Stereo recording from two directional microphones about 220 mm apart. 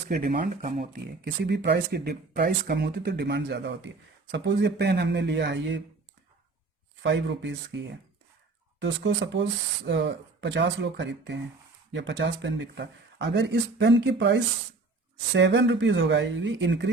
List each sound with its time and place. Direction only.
0.1 s speech: 40° right (ahead or behind)
7.0 s speech: 55° right (ahead or behind)